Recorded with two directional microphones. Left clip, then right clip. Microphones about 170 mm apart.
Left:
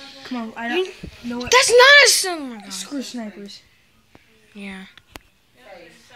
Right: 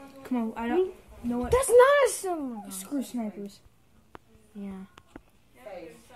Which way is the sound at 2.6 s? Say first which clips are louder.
Left 5 dB; 35° left (ahead or behind).